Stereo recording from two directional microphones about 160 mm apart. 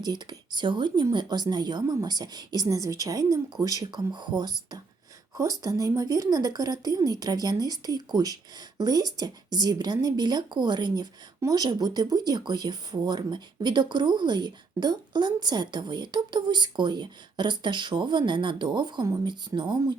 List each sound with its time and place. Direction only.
0.0 s speech: 25° right (ahead or behind)